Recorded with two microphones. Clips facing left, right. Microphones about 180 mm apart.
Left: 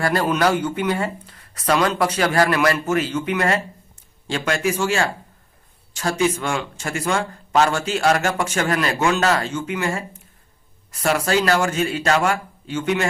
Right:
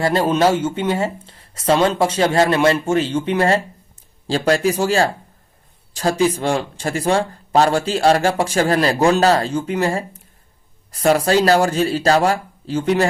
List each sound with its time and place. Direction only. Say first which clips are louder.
0.0 s speech: right 3 dB; 25° right (ahead or behind)